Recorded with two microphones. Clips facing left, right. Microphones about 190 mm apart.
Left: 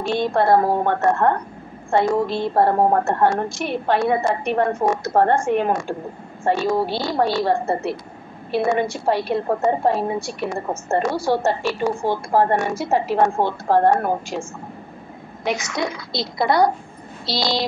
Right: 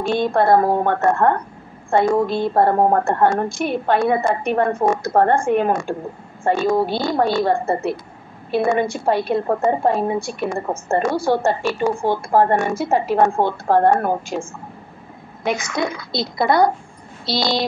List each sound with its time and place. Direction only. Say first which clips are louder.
0.0 s a woman's voice: right 2 dB; 50° right (ahead or behind)
15.4 s a woman's voice: right 2 dB; 55° right (ahead or behind)